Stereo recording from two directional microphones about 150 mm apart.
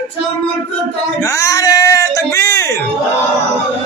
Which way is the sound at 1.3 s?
20° left (ahead or behind).